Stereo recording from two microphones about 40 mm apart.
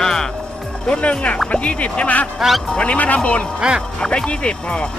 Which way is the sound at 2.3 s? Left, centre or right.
Centre.